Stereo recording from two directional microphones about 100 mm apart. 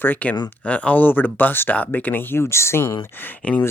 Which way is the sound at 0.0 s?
15° left (ahead or behind).